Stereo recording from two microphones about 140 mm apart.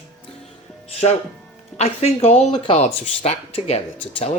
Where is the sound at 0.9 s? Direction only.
50° left (ahead or behind).